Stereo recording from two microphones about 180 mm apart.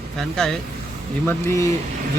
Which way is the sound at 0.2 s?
5° left (ahead or behind).